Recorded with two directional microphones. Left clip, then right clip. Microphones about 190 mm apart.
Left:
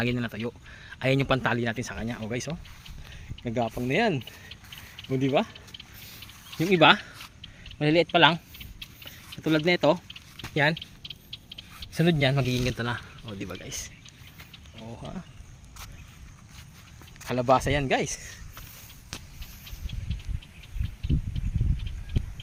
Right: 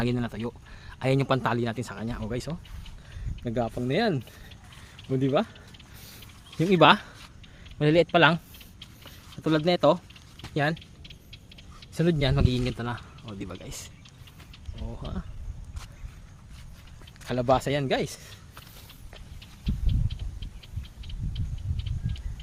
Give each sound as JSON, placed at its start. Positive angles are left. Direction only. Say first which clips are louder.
{"t": 0.0, "sound": "speech", "louder": "left 1 dB", "side_deg": -10}
{"t": 6.6, "sound": "speech", "louder": "even", "side_deg": -25}
{"t": 9.0, "sound": "a sound", "louder": "even", "side_deg": -15}
{"t": 10.5, "sound": "speech", "louder": "left 3 dB", "side_deg": -5}
{"t": 11.9, "sound": "speech", "louder": "left 2 dB", "side_deg": -5}
{"t": 12.6, "sound": "speech", "louder": "left 3 dB", "side_deg": 10}
{"t": 14.8, "sound": "speech", "louder": "right 1 dB", "side_deg": -10}
{"t": 17.2, "sound": "speech", "louder": "left 1 dB", "side_deg": -5}